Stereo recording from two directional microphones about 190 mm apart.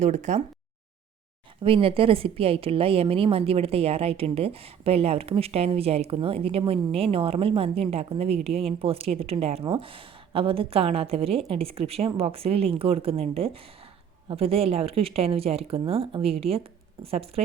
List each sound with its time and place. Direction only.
0.0 s a woman's voice: 40° right (ahead or behind)
1.6 s a woman's voice: 30° right (ahead or behind)